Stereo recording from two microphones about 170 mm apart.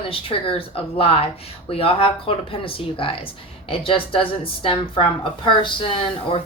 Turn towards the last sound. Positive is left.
turn(degrees=30)  # may be behind; listen again after turning